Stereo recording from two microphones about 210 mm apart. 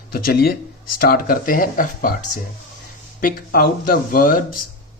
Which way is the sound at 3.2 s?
40° left (ahead or behind).